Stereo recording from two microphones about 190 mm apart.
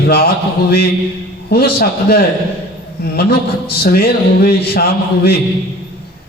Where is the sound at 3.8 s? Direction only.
50° left (ahead or behind).